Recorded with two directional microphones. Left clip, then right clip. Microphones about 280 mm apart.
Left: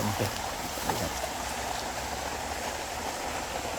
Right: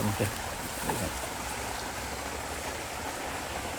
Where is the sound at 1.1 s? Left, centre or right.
Left.